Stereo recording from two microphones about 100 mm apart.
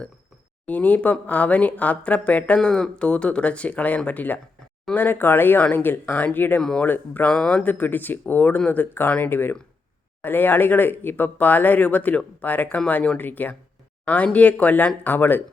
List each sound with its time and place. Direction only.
0.6 s speech: 15° left (ahead or behind)
6.6 s speech: 5° left (ahead or behind)
6.8 s speech: 20° left (ahead or behind)